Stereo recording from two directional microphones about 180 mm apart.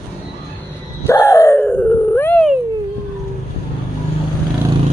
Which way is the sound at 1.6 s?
5° left (ahead or behind).